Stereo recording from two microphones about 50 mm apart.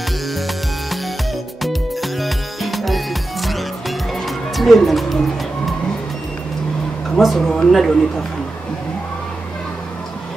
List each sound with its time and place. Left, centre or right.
1.6 s music: centre
7.2 s speech: centre
7.4 s speech: centre